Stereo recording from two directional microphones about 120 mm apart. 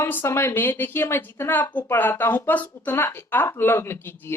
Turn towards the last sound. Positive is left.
turn(degrees=20)  # may be behind; listen again after turning